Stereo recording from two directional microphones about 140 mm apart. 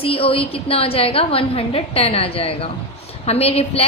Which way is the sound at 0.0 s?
40° left (ahead or behind).